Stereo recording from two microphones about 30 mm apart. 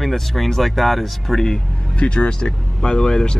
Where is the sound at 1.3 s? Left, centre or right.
Centre.